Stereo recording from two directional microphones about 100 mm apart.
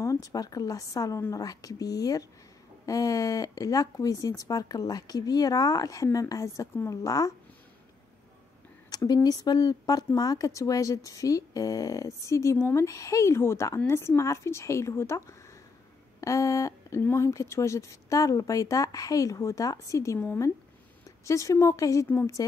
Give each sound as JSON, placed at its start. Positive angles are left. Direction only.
{"t": 0.0, "sound": "speech", "side_deg": 35}
{"t": 8.9, "sound": "speech", "side_deg": 40}
{"t": 21.3, "sound": "speech", "side_deg": 30}